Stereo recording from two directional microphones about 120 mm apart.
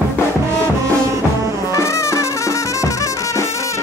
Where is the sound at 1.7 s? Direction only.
25° left (ahead or behind).